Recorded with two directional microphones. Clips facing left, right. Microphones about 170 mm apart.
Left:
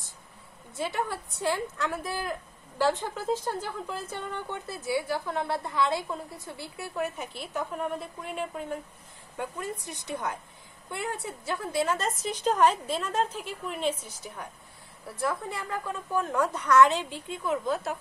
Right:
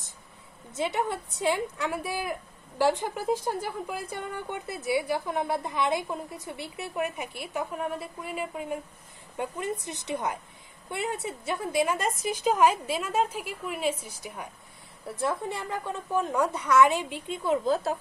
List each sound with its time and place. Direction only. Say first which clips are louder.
0.7 s a woman's voice: right 3 dB; 20° right (ahead or behind)
9.4 s a woman's voice: right 3 dB; 20° right (ahead or behind)
15.1 s a woman's voice: right 1 dB; 25° right (ahead or behind)